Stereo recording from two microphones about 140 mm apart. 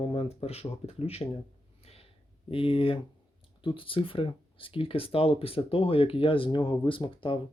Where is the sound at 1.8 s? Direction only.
45° left (ahead or behind).